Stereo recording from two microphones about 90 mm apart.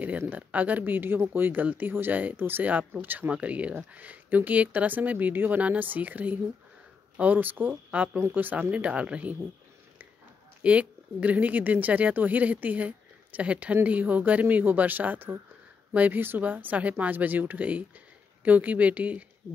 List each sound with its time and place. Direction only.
0.3 s a woman's voice: 15° right (ahead or behind)
10.6 s a woman's voice: 15° right (ahead or behind)